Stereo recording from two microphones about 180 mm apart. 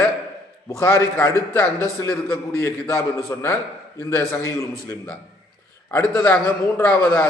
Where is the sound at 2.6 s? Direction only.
15° left (ahead or behind).